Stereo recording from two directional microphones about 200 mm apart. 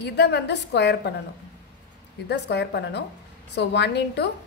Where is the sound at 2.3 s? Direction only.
60° left (ahead or behind).